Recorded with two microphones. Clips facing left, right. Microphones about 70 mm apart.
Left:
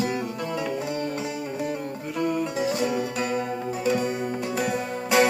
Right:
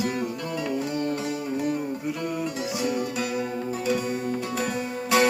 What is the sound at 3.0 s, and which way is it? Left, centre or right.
Music, left.